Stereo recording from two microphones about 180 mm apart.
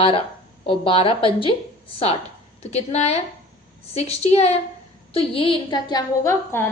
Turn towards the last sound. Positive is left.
turn(degrees=15)  # may be behind; listen again after turning